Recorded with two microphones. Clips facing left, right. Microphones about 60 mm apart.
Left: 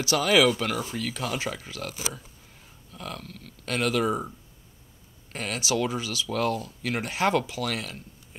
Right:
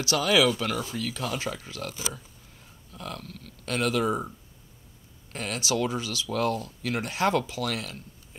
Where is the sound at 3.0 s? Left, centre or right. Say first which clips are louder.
Even; centre.